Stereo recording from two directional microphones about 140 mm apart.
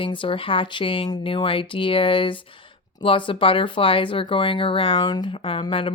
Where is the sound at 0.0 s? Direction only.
35° left (ahead or behind).